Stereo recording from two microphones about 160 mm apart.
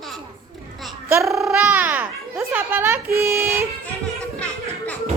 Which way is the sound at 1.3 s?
Centre (ahead or behind).